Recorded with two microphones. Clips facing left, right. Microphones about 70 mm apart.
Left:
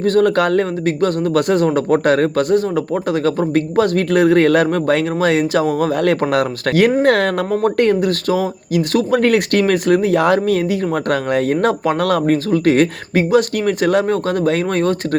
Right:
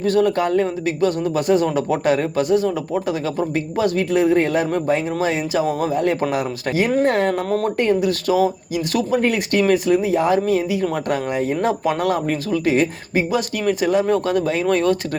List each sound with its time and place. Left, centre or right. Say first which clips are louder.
0.0 s speech: left 4 dB; left
1.6 s speech: left 4 dB; left
7.0 s speech: left 3 dB; left
7.8 s speech: left 3 dB; left